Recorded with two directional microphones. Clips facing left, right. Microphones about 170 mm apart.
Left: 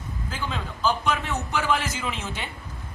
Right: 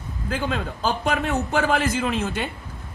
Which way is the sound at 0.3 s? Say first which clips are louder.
Right 7 dB; 55° right (ahead or behind).